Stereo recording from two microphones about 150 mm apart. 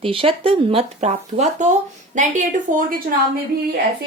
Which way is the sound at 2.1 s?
60° right (ahead or behind).